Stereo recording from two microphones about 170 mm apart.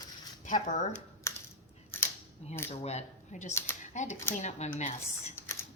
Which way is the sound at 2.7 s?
40° left (ahead or behind).